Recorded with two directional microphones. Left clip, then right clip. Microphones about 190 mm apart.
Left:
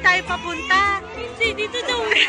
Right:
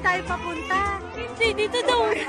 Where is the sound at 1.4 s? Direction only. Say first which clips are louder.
Right 1 dB; 65° right (ahead or behind).